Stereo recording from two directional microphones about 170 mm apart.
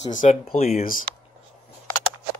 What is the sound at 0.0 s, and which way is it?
Speech, 45° left (ahead or behind).